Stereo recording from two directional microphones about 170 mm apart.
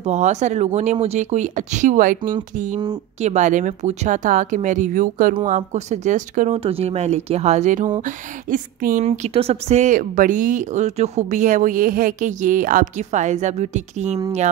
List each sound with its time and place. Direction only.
0.0 s a woman's voice: 45° right (ahead or behind)
6.6 s a woman's voice: 35° right (ahead or behind)